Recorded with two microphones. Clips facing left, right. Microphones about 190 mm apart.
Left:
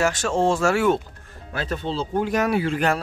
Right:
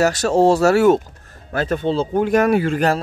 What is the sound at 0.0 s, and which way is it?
Speech, 40° right (ahead or behind).